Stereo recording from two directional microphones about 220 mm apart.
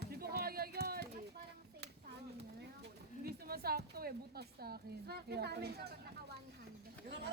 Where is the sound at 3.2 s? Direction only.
45° right (ahead or behind).